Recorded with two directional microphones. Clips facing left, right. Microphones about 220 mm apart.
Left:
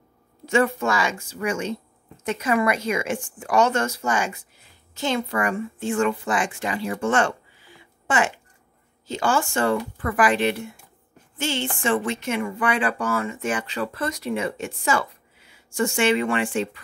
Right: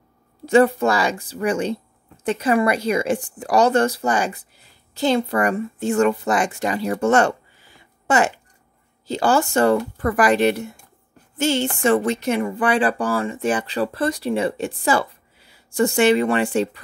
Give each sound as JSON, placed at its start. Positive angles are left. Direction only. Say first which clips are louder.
{"t": 0.5, "sound": "speech", "louder": "right 6 dB", "side_deg": -35}
{"t": 9.0, "sound": "speech", "louder": "right 4 dB", "side_deg": -35}